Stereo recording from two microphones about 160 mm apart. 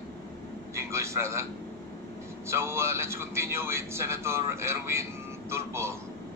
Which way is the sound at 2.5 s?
15° right (ahead or behind).